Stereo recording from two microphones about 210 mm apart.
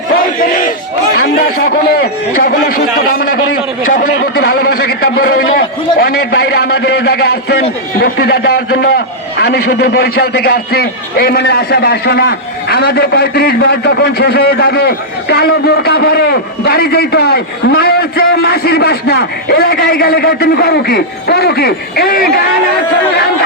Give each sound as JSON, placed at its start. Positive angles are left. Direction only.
{"t": 0.1, "sound": "battle cry", "side_deg": 40}
{"t": 2.5, "sound": "a man's voice", "side_deg": 45}